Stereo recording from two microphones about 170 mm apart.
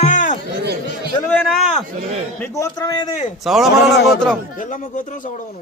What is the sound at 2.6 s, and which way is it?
Speech, 20° left (ahead or behind).